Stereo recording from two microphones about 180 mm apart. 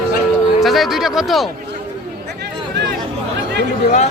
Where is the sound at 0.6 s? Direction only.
Centre (ahead or behind).